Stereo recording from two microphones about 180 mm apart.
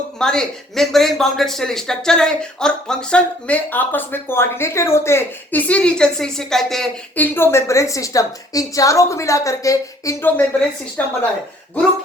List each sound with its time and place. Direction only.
0.2 s speech: 5° left (ahead or behind)
7.3 s a woman's voice: 15° left (ahead or behind)